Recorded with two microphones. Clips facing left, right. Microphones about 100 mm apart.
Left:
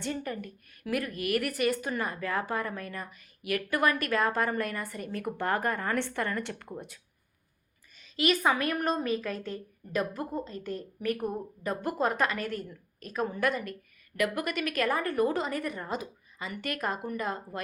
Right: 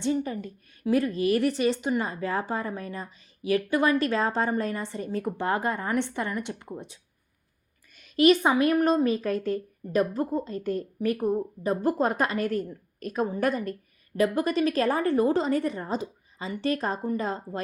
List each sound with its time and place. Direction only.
0.0 s a woman's voice: 20° right (ahead or behind)
8.2 s a woman's voice: 30° right (ahead or behind)